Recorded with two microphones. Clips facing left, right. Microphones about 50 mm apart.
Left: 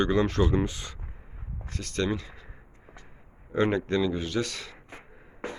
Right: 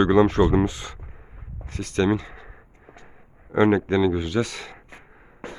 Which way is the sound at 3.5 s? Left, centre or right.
Centre.